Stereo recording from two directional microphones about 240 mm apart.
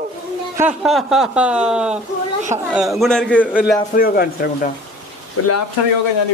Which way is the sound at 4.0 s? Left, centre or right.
Left.